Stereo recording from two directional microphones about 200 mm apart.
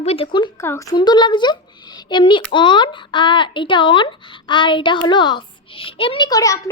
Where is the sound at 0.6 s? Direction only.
15° left (ahead or behind).